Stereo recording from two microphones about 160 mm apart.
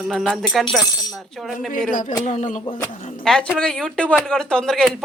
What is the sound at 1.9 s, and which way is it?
Speech, 55° left (ahead or behind).